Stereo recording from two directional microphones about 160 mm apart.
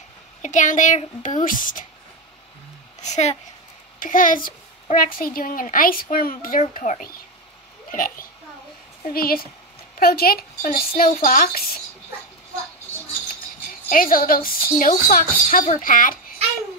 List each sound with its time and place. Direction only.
0.4 s a woman's voice: 50° left (ahead or behind)
3.0 s a woman's voice: 45° left (ahead or behind)
4.0 s a child's voice: 60° left (ahead or behind)
6.6 s speech: 45° left (ahead or behind)
7.9 s a child's voice: 60° left (ahead or behind)
13.8 s a child's voice: 60° left (ahead or behind)